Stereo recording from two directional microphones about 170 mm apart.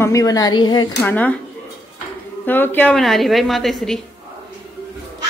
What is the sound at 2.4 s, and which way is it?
A woman's voice, 10° left (ahead or behind).